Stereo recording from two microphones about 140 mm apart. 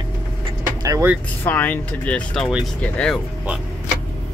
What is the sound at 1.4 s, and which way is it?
Speech, 10° left (ahead or behind).